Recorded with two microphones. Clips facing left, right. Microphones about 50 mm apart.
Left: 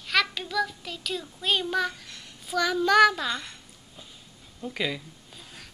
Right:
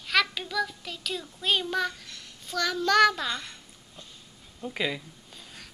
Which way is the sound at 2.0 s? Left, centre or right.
Centre.